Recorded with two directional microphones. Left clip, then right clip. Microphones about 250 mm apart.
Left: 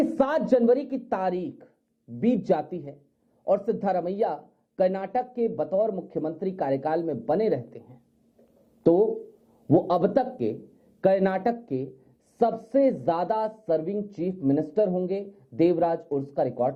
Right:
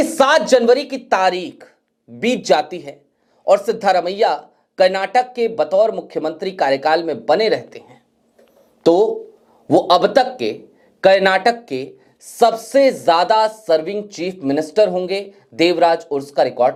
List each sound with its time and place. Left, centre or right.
0.2 s speech: centre
9.0 s speech: right
9.7 s speech: centre